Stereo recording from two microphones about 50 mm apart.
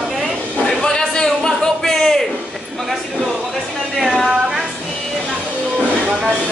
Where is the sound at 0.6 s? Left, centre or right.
Centre.